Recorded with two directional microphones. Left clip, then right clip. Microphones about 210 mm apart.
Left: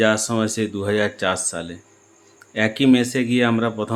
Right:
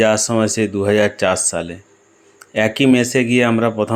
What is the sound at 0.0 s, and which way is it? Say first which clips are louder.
Speech: right 4 dB; 20° right (ahead or behind).